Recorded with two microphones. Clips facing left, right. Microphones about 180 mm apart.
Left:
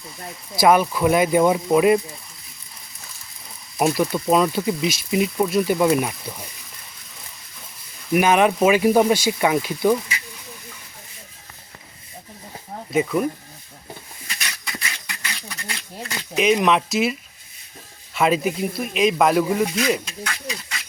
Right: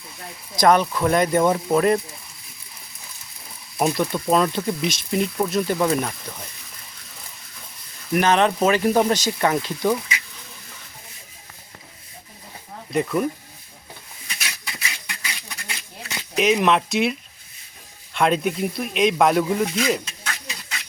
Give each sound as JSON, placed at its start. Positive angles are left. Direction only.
{"t": 0.5, "sound": "speech", "side_deg": 5}
{"t": 3.8, "sound": "speech", "side_deg": 5}
{"t": 8.1, "sound": "speech", "side_deg": 10}
{"t": 12.9, "sound": "speech", "side_deg": 0}
{"t": 14.3, "sound": "dog", "side_deg": -5}
{"t": 16.3, "sound": "speech", "side_deg": 0}